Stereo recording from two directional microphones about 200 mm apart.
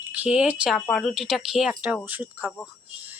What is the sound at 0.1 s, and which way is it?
Speech, 5° right (ahead or behind).